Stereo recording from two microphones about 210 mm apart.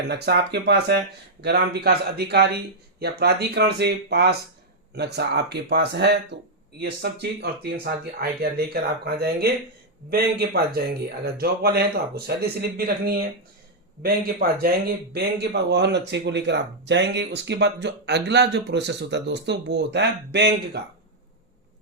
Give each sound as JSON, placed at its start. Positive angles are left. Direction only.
{"t": 0.1, "sound": "speech", "side_deg": -50}